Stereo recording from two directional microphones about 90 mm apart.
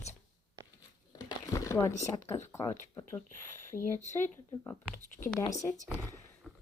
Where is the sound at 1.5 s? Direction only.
35° left (ahead or behind).